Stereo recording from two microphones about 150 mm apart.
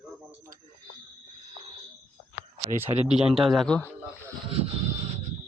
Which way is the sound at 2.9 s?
30° right (ahead or behind).